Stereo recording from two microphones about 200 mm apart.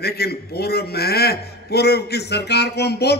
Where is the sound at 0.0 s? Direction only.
50° left (ahead or behind).